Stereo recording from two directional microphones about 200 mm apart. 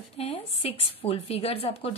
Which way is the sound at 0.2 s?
30° left (ahead or behind).